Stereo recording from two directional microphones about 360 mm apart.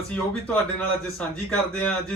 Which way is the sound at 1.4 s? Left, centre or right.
Centre.